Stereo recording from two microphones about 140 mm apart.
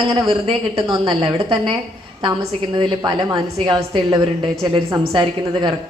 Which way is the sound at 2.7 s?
30° right (ahead or behind).